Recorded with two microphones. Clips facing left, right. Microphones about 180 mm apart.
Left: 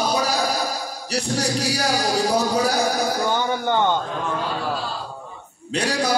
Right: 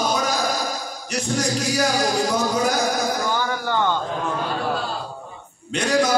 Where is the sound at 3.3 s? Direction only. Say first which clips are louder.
Left 2 dB; 20° left (ahead or behind).